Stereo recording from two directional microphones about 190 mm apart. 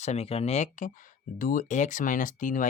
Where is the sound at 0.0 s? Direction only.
35° left (ahead or behind).